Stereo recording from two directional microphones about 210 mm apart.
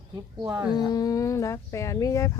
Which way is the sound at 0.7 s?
20° left (ahead or behind).